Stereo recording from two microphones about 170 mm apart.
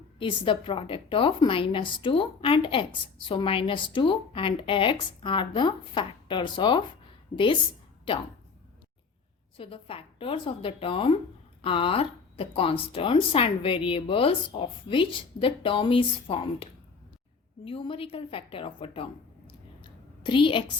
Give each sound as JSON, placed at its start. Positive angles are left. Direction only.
{"t": 0.2, "sound": "a woman's voice", "side_deg": 30}
{"t": 9.6, "sound": "a woman's voice", "side_deg": 30}
{"t": 17.7, "sound": "a woman's voice", "side_deg": 30}
{"t": 19.5, "sound": "a sound", "side_deg": 30}